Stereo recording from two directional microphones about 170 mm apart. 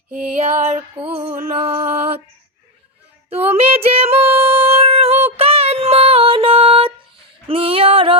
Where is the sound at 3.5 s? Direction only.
35° right (ahead or behind).